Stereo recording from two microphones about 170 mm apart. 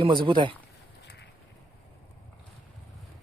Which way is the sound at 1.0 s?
80° left.